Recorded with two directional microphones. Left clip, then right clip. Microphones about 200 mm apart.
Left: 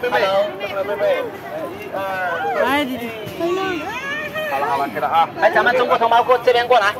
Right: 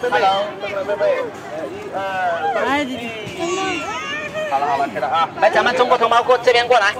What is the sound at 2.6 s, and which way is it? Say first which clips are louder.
Speech: left 1 dB; 10° left (ahead or behind).